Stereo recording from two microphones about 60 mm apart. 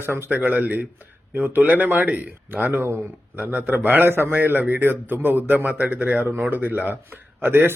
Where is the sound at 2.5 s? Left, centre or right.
Right.